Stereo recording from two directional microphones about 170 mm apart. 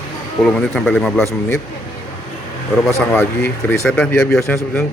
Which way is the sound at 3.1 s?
10° left (ahead or behind).